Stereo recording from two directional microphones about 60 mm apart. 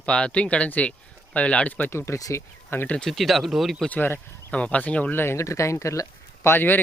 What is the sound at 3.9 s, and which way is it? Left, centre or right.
Speech, left.